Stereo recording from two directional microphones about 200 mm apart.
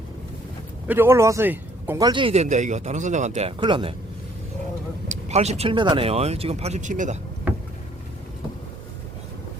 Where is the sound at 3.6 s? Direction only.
25° right (ahead or behind).